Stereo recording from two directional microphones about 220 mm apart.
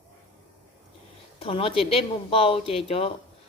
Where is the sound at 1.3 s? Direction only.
25° left (ahead or behind).